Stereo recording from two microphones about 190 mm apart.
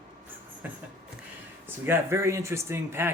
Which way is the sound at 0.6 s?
10° right (ahead or behind).